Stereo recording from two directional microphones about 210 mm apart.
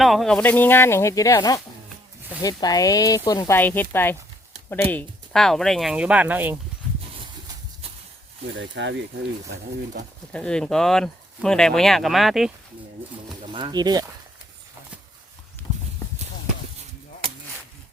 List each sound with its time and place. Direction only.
0.0 s speech: centre (ahead or behind)
8.5 s speech: 60° right (ahead or behind)
10.3 s speech: 5° left (ahead or behind)
13.5 s speech: 20° right (ahead or behind)